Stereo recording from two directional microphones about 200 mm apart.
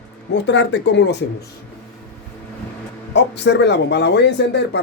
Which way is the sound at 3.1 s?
60° left (ahead or behind).